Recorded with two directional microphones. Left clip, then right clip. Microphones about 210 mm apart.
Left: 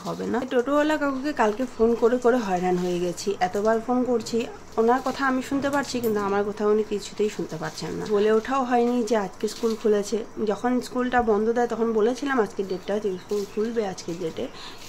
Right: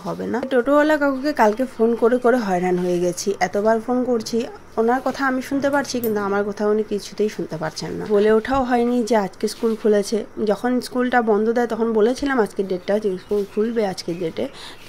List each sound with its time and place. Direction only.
0.5 s speech: 20° right (ahead or behind)